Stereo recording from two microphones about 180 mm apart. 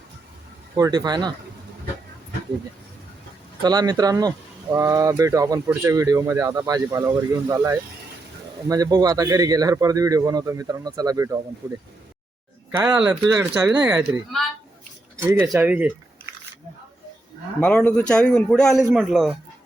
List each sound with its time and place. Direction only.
0.8 s speech: 20° right (ahead or behind)
3.6 s speech: 20° right (ahead or behind)
12.8 s a man's voice: 5° right (ahead or behind)
15.5 s speech: 10° right (ahead or behind)
17.6 s a man's voice: 5° left (ahead or behind)